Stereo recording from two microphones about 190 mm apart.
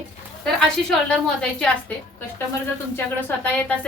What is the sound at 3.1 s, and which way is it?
Speech, 10° left (ahead or behind).